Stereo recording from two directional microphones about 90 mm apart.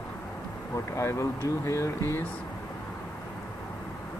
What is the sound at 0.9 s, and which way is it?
Speech, 35° left (ahead or behind).